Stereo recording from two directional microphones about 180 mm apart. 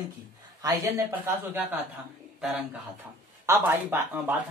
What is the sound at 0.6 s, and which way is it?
Speech, 20° right (ahead or behind).